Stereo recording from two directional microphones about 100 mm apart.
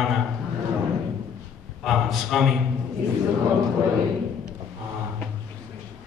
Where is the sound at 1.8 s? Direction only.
Centre (ahead or behind).